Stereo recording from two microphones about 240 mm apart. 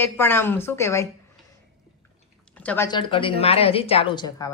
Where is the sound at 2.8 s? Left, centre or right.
Centre.